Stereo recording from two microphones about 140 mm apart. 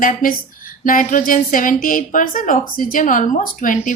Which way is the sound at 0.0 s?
80° left.